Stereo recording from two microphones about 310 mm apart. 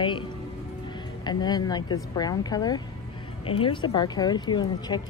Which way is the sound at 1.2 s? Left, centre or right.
Centre.